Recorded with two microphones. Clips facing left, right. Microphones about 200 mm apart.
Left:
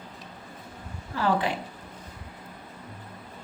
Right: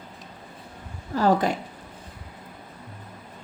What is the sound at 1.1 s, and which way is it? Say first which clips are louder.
Speech: right 5 dB; 40° right (ahead or behind).